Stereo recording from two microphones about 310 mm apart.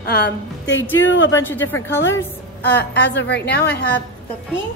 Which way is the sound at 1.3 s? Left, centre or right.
Centre.